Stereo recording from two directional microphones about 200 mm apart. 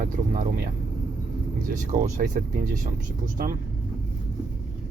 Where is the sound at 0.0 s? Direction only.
40° right (ahead or behind).